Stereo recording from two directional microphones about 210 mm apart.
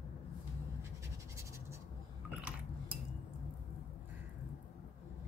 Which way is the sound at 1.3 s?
15° right (ahead or behind).